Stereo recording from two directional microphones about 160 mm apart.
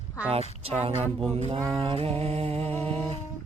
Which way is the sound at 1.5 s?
30° right (ahead or behind).